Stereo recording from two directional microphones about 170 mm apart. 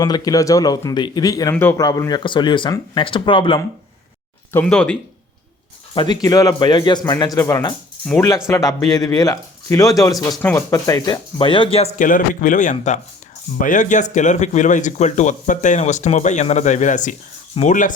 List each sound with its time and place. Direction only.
0.0 s speech: 20° left (ahead or behind)
4.5 s speech: 5° left (ahead or behind)
5.9 s speech: 25° left (ahead or behind)
8.0 s speech: 5° left (ahead or behind)
8.4 s speech: 20° left (ahead or behind); by 11.9 s 35° left (ahead or behind)
11.9 s speech: 50° left (ahead or behind)